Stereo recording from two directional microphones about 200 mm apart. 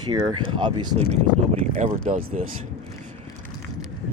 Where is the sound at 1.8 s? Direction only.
35° right (ahead or behind).